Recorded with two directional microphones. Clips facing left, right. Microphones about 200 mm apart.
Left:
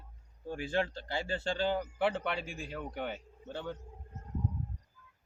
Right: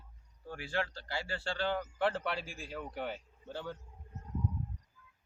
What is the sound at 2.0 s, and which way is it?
A man's voice, centre (ahead or behind).